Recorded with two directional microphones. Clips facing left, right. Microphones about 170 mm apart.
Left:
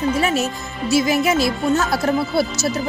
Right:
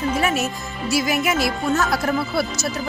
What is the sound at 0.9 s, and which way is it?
Speech, 25° left (ahead or behind).